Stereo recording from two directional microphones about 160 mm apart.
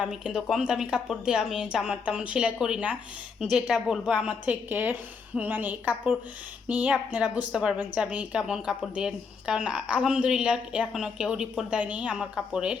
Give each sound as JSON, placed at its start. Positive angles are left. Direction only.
{"t": 0.0, "sound": "a woman's voice", "side_deg": -5}